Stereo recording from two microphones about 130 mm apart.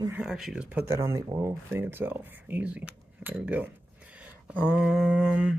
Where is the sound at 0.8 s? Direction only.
20° right (ahead or behind).